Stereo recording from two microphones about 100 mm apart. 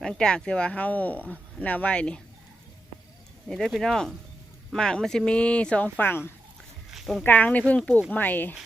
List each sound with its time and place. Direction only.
0.0 s speech: 5° left (ahead or behind)
3.5 s speech: 5° left (ahead or behind); by 6.3 s 20° left (ahead or behind)
6.9 s a sound: centre (ahead or behind)
7.3 s speech: 15° left (ahead or behind)